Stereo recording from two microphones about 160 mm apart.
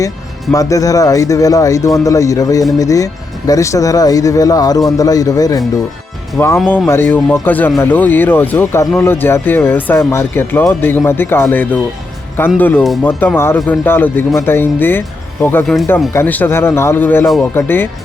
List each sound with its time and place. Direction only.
0.5 s speech: 20° left (ahead or behind)
6.7 s speech: 15° left (ahead or behind)
12.8 s speech: centre (ahead or behind)
13.1 s speech: 10° left (ahead or behind)
15.6 s speech: centre (ahead or behind)
16.1 s speech: 10° left (ahead or behind)